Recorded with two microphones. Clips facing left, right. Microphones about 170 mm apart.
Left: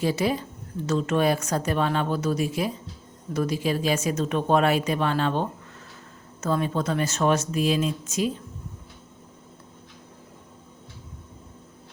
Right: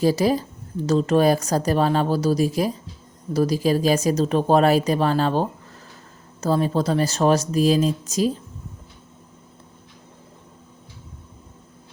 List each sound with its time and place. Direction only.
0.0 s speech: 40° right (ahead or behind)